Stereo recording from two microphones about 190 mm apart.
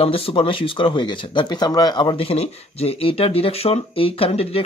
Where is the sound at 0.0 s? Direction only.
30° left (ahead or behind).